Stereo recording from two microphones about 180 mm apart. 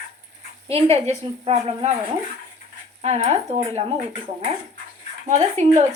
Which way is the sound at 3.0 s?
40° right (ahead or behind).